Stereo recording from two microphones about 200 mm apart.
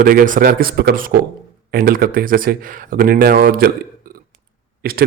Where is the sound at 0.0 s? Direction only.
45° right (ahead or behind).